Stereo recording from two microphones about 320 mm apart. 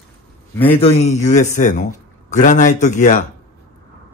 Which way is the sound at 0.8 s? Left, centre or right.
Left.